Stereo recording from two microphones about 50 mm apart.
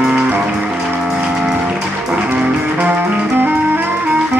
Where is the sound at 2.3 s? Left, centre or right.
Right.